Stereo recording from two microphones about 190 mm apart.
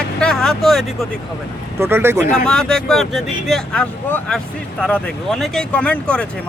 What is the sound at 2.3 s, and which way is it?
Speech, 5° left (ahead or behind).